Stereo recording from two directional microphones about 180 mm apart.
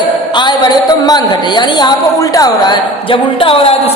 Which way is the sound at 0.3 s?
25° left (ahead or behind).